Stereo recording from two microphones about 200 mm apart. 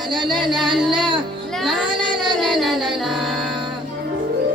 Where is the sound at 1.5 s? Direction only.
Centre (ahead or behind).